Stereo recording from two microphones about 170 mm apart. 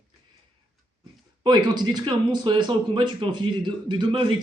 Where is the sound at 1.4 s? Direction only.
25° right (ahead or behind).